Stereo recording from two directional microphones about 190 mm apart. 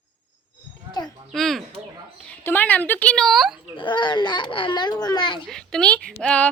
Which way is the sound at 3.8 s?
25° left (ahead or behind).